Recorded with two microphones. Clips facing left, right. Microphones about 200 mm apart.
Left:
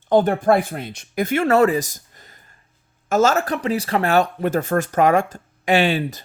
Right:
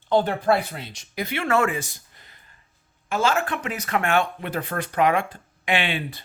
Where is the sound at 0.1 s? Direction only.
50° left (ahead or behind).